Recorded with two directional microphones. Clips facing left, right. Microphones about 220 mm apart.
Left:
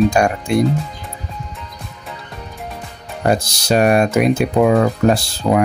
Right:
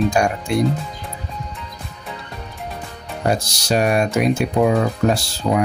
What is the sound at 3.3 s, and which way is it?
Speech, 60° left (ahead or behind).